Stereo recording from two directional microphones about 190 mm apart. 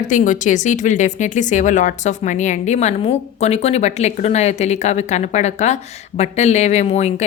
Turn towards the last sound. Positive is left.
turn(degrees=35)  # may be behind; listen again after turning